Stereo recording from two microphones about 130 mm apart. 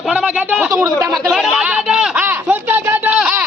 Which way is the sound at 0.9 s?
25° right (ahead or behind).